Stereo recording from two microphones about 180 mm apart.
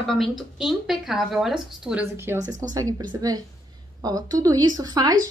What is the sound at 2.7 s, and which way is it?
Speech, 20° right (ahead or behind).